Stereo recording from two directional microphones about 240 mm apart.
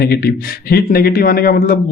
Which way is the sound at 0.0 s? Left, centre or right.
Left.